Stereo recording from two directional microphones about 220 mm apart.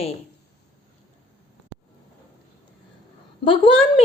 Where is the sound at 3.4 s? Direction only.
25° left (ahead or behind).